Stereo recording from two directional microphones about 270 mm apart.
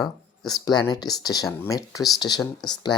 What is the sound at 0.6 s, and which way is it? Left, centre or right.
Speech, centre.